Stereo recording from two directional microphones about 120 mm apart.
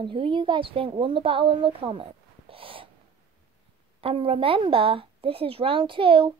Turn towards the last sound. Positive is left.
turn(degrees=-45)  # may be behind; listen again after turning